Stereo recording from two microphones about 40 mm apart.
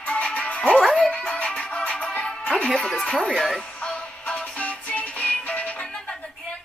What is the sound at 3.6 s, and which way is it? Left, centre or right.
Music, left.